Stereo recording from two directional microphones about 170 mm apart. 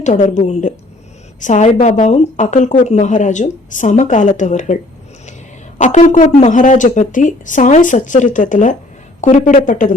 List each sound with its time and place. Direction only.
0.0 s a woman's voice: 45° left (ahead or behind)